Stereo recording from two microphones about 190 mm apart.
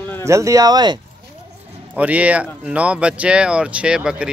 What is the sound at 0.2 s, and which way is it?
Speech, 15° right (ahead or behind).